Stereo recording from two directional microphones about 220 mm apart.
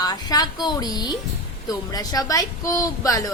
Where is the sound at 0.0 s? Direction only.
20° left (ahead or behind).